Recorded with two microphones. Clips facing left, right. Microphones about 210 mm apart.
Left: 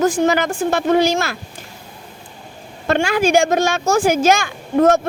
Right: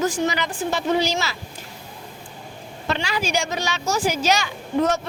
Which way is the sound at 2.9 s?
50° left (ahead or behind).